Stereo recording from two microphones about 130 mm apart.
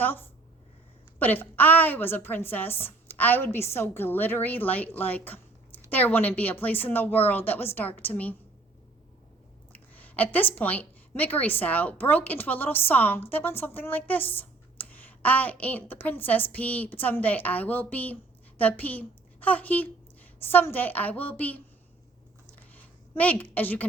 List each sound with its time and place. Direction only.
0.0 s speech: 15° left (ahead or behind)
9.7 s speech: 10° left (ahead or behind)
22.4 s a sound: 15° left (ahead or behind)